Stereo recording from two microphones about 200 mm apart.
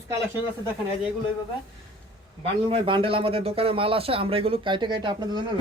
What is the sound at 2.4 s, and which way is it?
A man's voice, 25° right (ahead or behind).